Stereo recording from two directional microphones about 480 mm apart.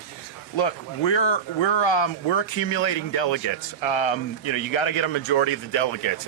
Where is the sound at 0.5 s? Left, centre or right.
Left.